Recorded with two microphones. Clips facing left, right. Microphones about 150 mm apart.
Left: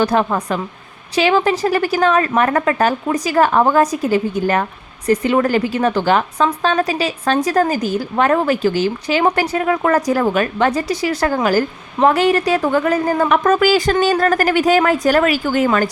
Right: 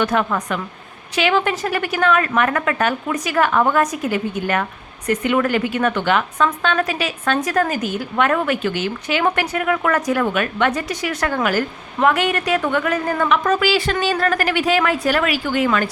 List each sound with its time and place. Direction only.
0.0 s a woman's voice: 35° left (ahead or behind)
13.2 s a woman's voice: 45° left (ahead or behind)